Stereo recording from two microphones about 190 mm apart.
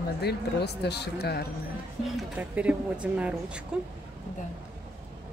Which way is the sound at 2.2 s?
5° right (ahead or behind).